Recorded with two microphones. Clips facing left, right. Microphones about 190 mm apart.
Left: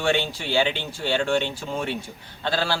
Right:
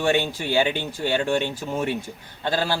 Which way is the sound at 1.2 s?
10° right (ahead or behind).